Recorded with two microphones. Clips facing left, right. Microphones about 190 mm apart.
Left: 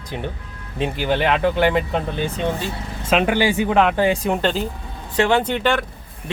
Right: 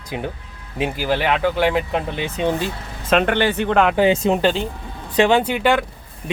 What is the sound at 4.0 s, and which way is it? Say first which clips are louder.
Speech: right 3 dB; 25° right (ahead or behind).